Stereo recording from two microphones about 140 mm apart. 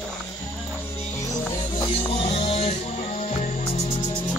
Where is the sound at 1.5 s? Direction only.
35° left (ahead or behind).